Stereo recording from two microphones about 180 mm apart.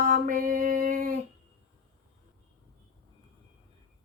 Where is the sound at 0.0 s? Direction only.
50° right (ahead or behind).